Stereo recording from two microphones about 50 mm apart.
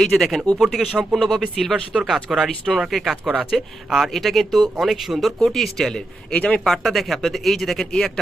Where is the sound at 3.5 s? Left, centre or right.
Centre.